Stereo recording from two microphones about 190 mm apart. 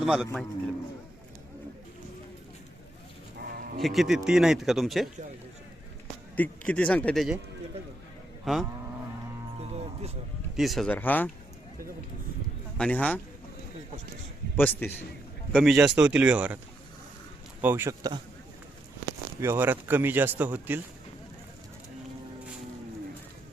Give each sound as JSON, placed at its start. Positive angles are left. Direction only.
{"t": 0.0, "sound": "a man's voice", "side_deg": 0}
{"t": 3.3, "sound": "livestock", "side_deg": -55}
{"t": 3.8, "sound": "speech", "side_deg": 0}
{"t": 6.3, "sound": "speech", "side_deg": 5}
{"t": 8.5, "sound": "speech", "side_deg": 0}
{"t": 9.6, "sound": "music", "side_deg": -35}
{"t": 10.6, "sound": "speech", "side_deg": 0}
{"t": 12.7, "sound": "a man's voice", "side_deg": 5}
{"t": 14.5, "sound": "speech", "side_deg": 10}
{"t": 15.5, "sound": "speech", "side_deg": 0}
{"t": 17.6, "sound": "speech", "side_deg": -10}
{"t": 19.4, "sound": "speech", "side_deg": -15}